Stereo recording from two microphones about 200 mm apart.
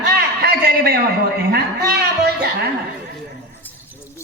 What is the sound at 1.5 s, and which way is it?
Music, 50° right (ahead or behind).